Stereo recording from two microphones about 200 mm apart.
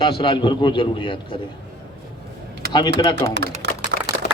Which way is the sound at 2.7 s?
20° left (ahead or behind).